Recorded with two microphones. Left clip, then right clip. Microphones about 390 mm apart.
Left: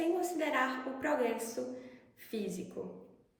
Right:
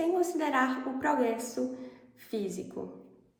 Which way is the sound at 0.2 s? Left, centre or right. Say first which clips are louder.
Right 4 dB; centre.